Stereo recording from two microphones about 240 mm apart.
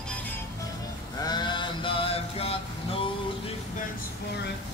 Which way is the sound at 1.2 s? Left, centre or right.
Centre.